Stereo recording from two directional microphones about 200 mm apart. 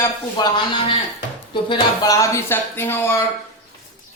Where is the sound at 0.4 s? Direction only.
20° left (ahead or behind).